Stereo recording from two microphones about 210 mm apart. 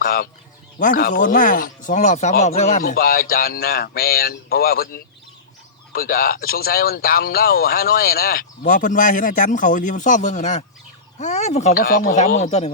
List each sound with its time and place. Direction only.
0.0 s speech: 45° left (ahead or behind)